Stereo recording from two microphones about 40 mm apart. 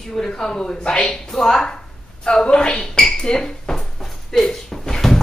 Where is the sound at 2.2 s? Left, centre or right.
Left.